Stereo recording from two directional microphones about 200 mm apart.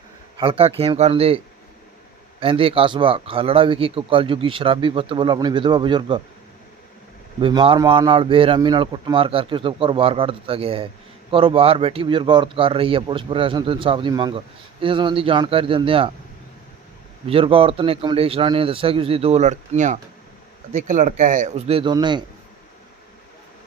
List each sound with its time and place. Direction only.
0.3 s speech: 30° right (ahead or behind)
2.4 s speech: 25° right (ahead or behind)
7.4 s speech: 25° right (ahead or behind)
17.2 s speech: 30° right (ahead or behind)